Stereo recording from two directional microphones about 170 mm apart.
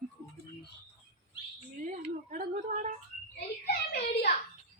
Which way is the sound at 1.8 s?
50° right (ahead or behind).